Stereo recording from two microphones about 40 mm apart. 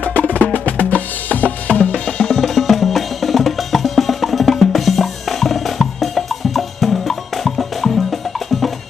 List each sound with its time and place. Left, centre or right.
0.3 s percussion: left
2.0 s drum: centre
2.3 s music: centre